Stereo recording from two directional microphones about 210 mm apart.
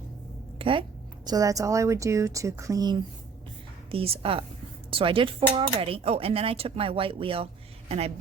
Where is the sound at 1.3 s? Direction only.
15° right (ahead or behind).